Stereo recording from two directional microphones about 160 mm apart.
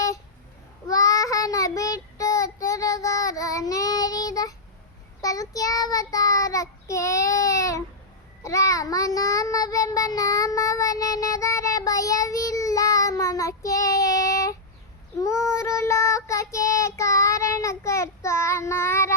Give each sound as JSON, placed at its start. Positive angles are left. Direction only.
{"t": 0.9, "sound": "child singing", "side_deg": 20}